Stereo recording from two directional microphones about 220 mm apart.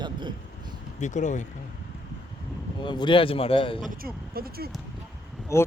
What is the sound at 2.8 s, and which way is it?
Speech, 20° left (ahead or behind).